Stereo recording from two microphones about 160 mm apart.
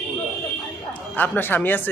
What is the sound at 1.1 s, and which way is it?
Speech, 10° left (ahead or behind).